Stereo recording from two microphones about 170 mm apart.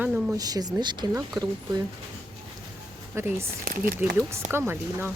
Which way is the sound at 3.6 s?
60° right (ahead or behind).